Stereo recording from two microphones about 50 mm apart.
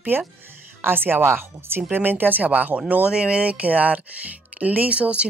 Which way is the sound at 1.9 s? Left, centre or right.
Right.